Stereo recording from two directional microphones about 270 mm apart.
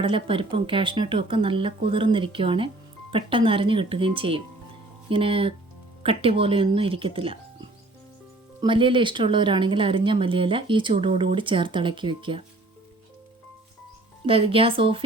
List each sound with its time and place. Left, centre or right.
0.0 s speech: centre
14.3 s speech: centre